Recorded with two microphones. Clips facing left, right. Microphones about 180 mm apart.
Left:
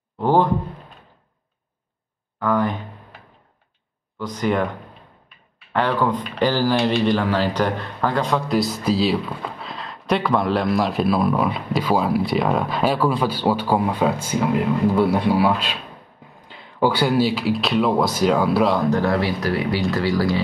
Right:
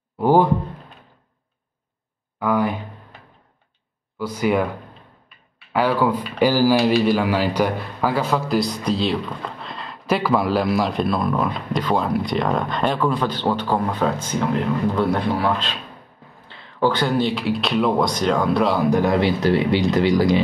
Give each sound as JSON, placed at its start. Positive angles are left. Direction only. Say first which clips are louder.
{"t": 0.2, "sound": "speech", "louder": "right 2 dB", "side_deg": -10}
{"t": 2.4, "sound": "a sound", "louder": "even", "side_deg": -10}
{"t": 4.2, "sound": "speech", "louder": "right 1 dB", "side_deg": -10}
{"t": 5.7, "sound": "speech", "louder": "right 1 dB", "side_deg": -5}
{"t": 18.9, "sound": "speech", "louder": "right 2 dB", "side_deg": -15}